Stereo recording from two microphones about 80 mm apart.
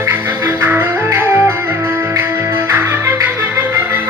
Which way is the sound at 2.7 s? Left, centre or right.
Right.